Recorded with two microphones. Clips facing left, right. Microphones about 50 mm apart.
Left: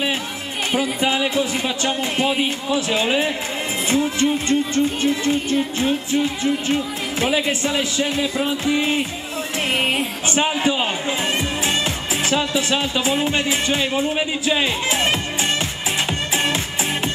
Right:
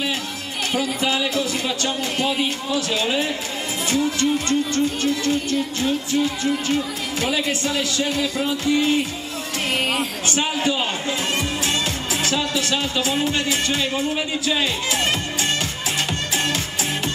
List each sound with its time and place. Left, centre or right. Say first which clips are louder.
0.7 s music: left 2 dB; centre
12.3 s music: left 3 dB; left